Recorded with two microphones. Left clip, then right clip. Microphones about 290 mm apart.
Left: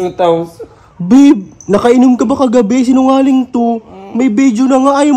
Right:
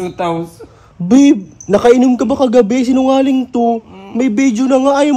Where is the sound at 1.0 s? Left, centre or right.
Left.